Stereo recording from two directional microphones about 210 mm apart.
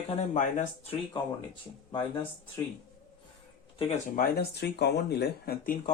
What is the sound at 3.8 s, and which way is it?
Speech, 35° left (ahead or behind).